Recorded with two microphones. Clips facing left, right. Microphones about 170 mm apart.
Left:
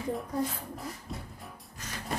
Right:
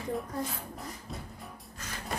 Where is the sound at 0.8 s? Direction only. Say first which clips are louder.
Left 1 dB; centre (ahead or behind).